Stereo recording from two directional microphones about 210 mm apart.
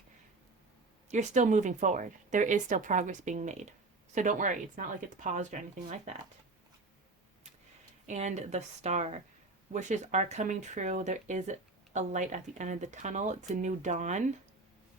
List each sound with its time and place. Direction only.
1.1 s speech: 35° right (ahead or behind)
8.0 s speech: 35° right (ahead or behind)